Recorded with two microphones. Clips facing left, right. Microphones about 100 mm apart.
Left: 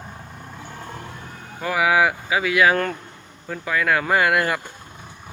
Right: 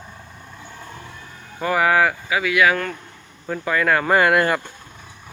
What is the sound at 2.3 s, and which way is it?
Speech, 25° left (ahead or behind).